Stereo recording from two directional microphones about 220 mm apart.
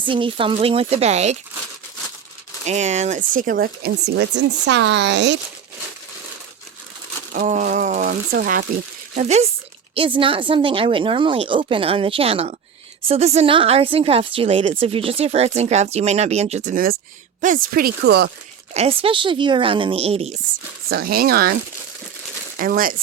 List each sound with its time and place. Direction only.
0.0 s a woman's voice: 25° right (ahead or behind)
2.6 s speech: 30° right (ahead or behind); by 5.4 s 50° right (ahead or behind)
7.3 s a sound: 35° right (ahead or behind)
9.1 s a woman's voice: 30° right (ahead or behind); by 18.3 s 45° right (ahead or behind)
18.7 s a woman's voice: 25° right (ahead or behind)
20.9 s speech: 45° right (ahead or behind)
22.5 s speech: 40° right (ahead or behind)